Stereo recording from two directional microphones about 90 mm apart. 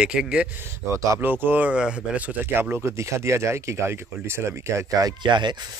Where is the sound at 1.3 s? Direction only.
20° right (ahead or behind); by 5.1 s 35° right (ahead or behind).